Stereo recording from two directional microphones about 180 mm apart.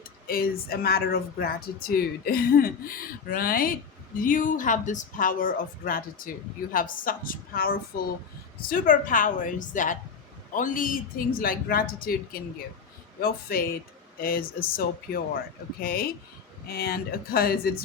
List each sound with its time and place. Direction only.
0.3 s speech: 55° left (ahead or behind)
8.7 s speech: 50° left (ahead or behind)